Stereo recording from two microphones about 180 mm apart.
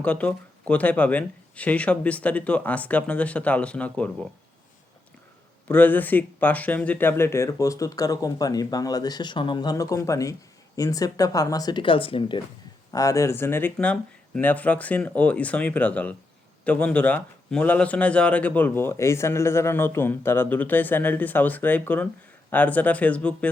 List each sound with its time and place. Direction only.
0.0 s speech: 5° left (ahead or behind)
5.6 s speech: 10° left (ahead or behind); by 12.4 s 30° left (ahead or behind)
12.9 s speech: 20° left (ahead or behind)